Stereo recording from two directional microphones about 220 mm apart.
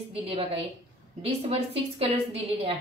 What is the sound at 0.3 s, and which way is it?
Speech, 25° right (ahead or behind).